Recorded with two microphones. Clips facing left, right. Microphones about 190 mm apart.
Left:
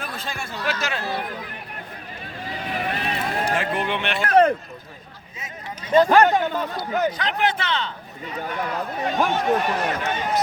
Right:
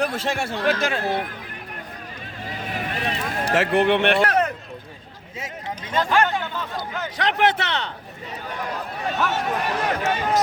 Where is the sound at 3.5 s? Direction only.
80° right.